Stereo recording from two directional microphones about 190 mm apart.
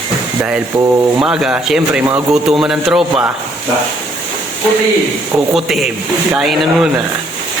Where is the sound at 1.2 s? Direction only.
5° right (ahead or behind).